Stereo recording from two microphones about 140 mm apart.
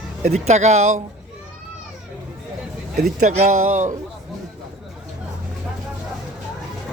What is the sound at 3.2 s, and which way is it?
Speech, 60° right (ahead or behind).